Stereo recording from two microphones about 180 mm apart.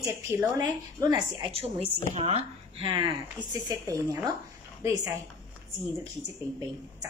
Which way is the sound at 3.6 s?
20° right (ahead or behind).